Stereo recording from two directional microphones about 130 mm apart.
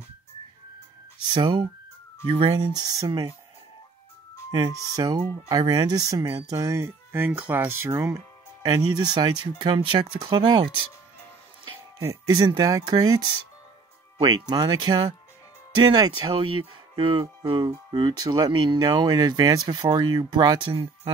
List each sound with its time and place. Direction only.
1.3 s speech: 35° right (ahead or behind)
2.2 s speech: 45° right (ahead or behind)
2.7 s speech: 30° right (ahead or behind)
4.5 s speech: 25° right (ahead or behind)
12.0 s speech: 25° right (ahead or behind)